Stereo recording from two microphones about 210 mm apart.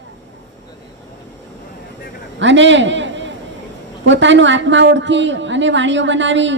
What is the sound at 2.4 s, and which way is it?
A man's voice, 60° right (ahead or behind).